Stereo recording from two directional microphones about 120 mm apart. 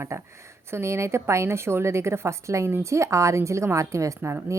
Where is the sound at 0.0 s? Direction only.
20° right (ahead or behind).